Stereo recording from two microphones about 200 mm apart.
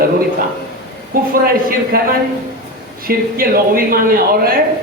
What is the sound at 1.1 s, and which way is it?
A man's voice, 45° right (ahead or behind).